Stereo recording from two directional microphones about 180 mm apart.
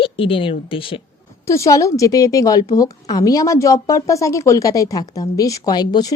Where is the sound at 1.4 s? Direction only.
15° left (ahead or behind).